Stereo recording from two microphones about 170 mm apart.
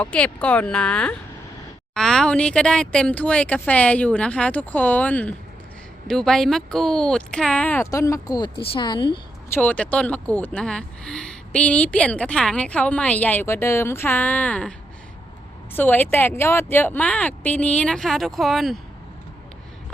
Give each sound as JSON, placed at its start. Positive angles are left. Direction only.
{"t": 0.0, "sound": "a woman's voice", "side_deg": 5}
{"t": 9.5, "sound": "speech", "side_deg": 10}
{"t": 15.7, "sound": "speech", "side_deg": 10}